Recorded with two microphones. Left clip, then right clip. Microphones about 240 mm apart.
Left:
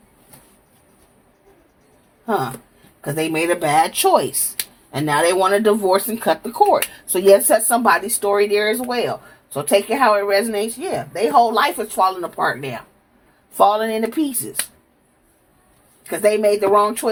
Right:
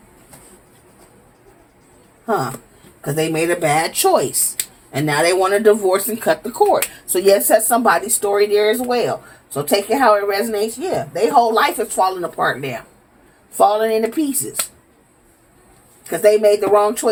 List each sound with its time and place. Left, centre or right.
3.0 s speech: left
16.0 s speech: left